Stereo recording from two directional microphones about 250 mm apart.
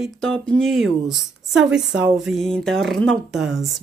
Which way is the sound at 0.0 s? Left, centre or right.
Centre.